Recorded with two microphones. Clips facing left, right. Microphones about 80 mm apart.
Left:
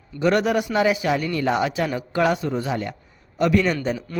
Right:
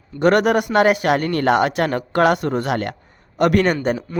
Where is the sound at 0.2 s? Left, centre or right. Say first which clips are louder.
Right 4 dB; right.